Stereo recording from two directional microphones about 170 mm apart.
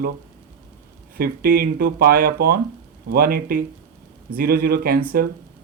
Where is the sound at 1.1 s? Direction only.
60° right (ahead or behind).